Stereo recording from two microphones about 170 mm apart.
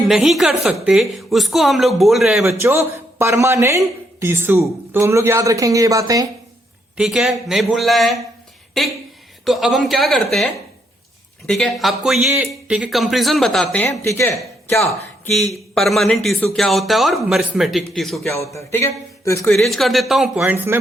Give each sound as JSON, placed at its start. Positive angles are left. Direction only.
{"t": 0.1, "sound": "a woman's voice", "side_deg": 0}
{"t": 2.6, "sound": "speech", "side_deg": -15}
{"t": 6.9, "sound": "a woman's voice", "side_deg": -5}
{"t": 14.0, "sound": "a man's voice", "side_deg": 15}
{"t": 14.8, "sound": "a woman's voice", "side_deg": 0}
{"t": 18.5, "sound": "a man's voice", "side_deg": 15}
{"t": 19.5, "sound": "a woman's voice", "side_deg": 0}